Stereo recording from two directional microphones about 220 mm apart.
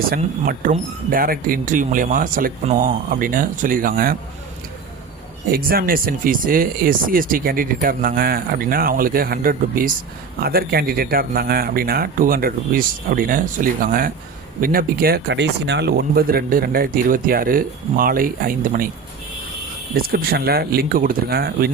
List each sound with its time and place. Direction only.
0.1 s speech: 40° right (ahead or behind)
5.5 s speech: 40° right (ahead or behind)
19.9 s speech: 45° right (ahead or behind)